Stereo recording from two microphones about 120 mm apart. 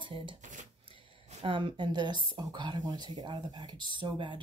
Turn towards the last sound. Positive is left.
turn(degrees=-40)  # may be behind; listen again after turning